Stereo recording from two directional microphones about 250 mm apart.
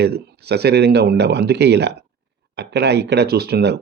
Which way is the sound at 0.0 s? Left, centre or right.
Right.